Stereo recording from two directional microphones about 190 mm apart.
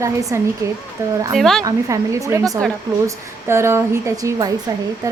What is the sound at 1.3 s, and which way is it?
Speech, centre (ahead or behind).